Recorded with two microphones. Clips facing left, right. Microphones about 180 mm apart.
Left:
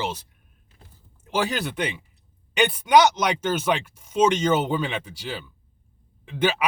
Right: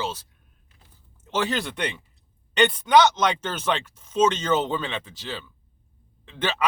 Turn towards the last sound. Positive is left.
turn(degrees=10)  # may be behind; listen again after turning